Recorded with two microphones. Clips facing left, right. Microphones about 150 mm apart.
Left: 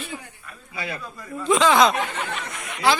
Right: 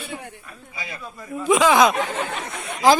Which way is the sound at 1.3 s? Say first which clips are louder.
Right 1 dB; 10° right (ahead or behind).